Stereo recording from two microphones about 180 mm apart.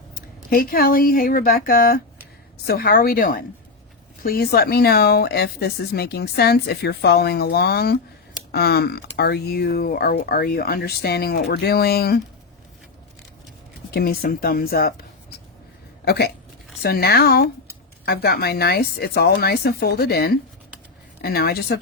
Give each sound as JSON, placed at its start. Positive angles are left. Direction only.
{"t": 0.1, "sound": "speech", "side_deg": 55}
{"t": 13.9, "sound": "speech", "side_deg": 55}
{"t": 16.0, "sound": "speech", "side_deg": 65}